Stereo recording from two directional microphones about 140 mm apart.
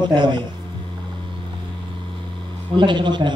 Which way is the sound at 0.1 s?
35° right (ahead or behind).